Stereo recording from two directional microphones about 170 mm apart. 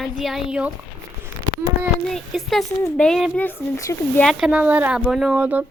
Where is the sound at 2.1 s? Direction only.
Centre (ahead or behind).